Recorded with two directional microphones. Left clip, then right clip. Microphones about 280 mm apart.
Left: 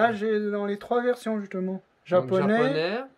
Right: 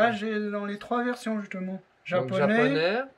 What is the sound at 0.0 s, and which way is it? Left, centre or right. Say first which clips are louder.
Speech: left 2 dB; centre.